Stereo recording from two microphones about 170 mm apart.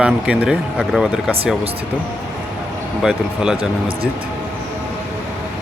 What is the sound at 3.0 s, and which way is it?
Speech, 5° right (ahead or behind).